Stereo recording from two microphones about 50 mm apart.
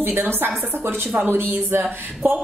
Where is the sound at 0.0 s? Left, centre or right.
Right.